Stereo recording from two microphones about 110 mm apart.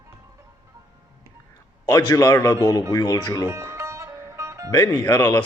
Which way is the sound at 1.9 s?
35° left (ahead or behind).